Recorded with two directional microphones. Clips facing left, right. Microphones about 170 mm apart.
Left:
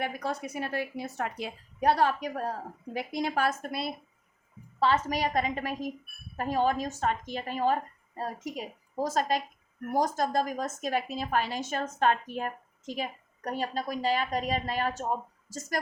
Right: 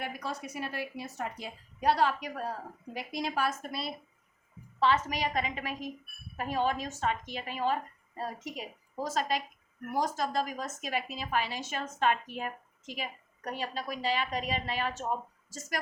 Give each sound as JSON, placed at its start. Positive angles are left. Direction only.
{"t": 0.0, "sound": "a woman's voice", "side_deg": 55}
{"t": 4.8, "sound": "a woman's voice", "side_deg": 40}